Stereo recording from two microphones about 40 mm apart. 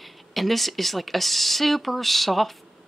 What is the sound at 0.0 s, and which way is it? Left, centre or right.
Speech, centre.